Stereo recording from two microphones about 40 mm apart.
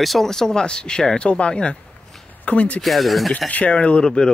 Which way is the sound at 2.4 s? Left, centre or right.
Left.